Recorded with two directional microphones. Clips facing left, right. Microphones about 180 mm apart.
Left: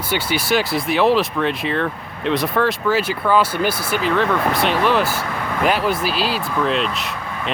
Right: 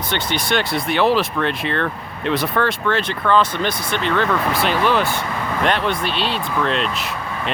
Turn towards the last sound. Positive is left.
turn(degrees=5)  # may be behind; listen again after turning